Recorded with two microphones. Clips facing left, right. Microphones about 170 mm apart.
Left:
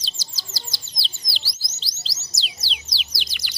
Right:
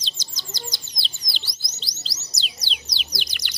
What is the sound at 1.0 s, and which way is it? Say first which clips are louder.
Bird: even; 25° left (ahead or behind).